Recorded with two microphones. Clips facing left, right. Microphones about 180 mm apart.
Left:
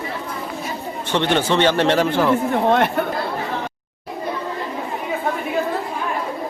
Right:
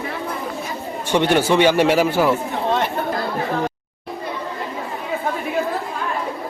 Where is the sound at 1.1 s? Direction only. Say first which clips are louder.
Right 2 dB; 10° right (ahead or behind).